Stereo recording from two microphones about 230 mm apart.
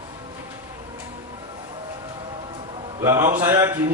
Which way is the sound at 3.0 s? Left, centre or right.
Centre.